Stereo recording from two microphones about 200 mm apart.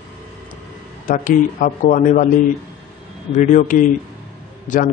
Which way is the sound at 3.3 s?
40° left (ahead or behind).